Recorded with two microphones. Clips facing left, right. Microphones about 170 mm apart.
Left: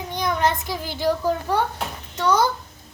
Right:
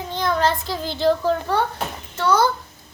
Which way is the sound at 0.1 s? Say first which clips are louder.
Right 2 dB; 15° left (ahead or behind).